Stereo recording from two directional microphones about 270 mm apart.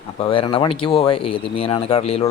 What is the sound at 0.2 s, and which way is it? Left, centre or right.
Speech, centre.